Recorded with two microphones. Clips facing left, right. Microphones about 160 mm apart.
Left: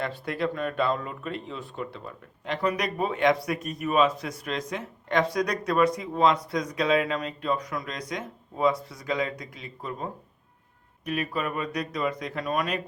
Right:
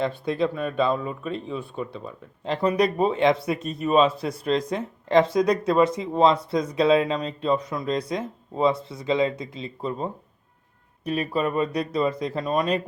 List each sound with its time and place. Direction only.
0.0 s speech: 20° right (ahead or behind)
2.4 s speech: 30° right (ahead or behind)